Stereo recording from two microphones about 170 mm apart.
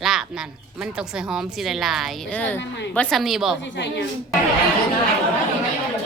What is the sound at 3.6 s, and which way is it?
Speech, 90° left.